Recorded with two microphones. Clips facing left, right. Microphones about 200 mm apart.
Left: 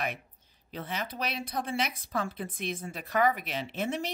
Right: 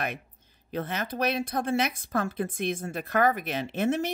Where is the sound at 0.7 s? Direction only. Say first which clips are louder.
Right 5 dB; 50° right (ahead or behind).